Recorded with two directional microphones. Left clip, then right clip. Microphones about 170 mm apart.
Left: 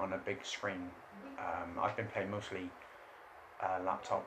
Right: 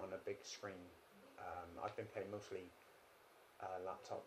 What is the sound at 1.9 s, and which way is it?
Speech, 55° right (ahead or behind).